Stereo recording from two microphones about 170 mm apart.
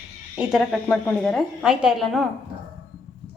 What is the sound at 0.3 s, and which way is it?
A woman's voice, centre (ahead or behind).